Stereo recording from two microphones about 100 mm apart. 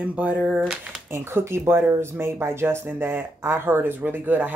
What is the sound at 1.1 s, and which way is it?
Speech, 25° right (ahead or behind).